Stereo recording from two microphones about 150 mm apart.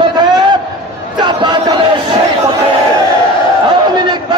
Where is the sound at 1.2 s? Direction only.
30° right (ahead or behind).